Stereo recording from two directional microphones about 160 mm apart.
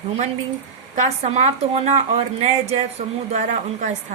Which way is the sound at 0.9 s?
45° right (ahead or behind).